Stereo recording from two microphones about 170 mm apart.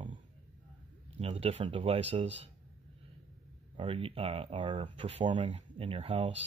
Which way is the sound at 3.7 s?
30° right (ahead or behind).